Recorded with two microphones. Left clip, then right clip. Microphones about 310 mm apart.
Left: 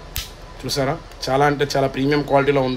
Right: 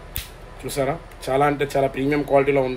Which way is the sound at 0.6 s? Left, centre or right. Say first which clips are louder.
Left 2 dB; left.